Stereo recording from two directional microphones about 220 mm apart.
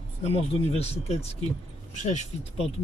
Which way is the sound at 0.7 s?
25° left (ahead or behind).